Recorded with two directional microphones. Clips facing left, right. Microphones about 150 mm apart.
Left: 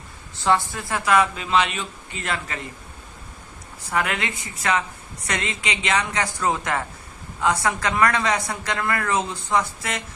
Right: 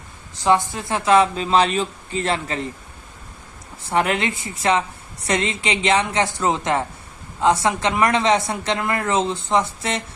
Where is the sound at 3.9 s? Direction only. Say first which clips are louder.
Right 5 dB; 30° right (ahead or behind).